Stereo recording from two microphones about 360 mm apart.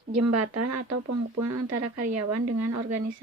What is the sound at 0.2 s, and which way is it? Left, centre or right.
A woman's voice, right.